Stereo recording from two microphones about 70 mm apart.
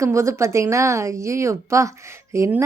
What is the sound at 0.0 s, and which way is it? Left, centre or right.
A woman's voice, right.